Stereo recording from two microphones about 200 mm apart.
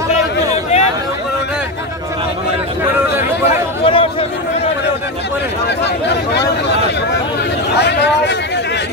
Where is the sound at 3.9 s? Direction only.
25° left (ahead or behind).